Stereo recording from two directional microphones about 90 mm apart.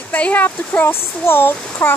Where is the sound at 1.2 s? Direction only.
25° left (ahead or behind).